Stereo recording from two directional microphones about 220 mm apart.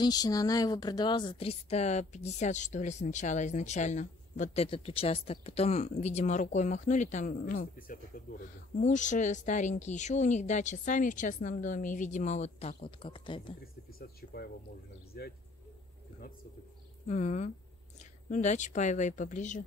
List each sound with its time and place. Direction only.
0.0 s a woman's voice: 15° left (ahead or behind)
13.9 s a sound: 45° left (ahead or behind)
15.2 s speech: 45° left (ahead or behind)
17.1 s a woman's voice: 30° left (ahead or behind)